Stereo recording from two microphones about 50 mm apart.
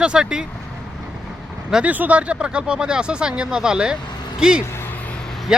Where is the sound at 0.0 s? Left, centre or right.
Centre.